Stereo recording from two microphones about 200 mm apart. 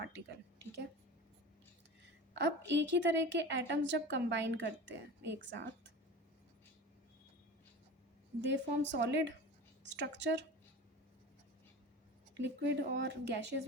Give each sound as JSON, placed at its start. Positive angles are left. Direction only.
{"t": 2.3, "sound": "a woman's voice", "side_deg": -60}
{"t": 8.4, "sound": "a woman's voice", "side_deg": -60}
{"t": 12.4, "sound": "a woman's voice", "side_deg": -60}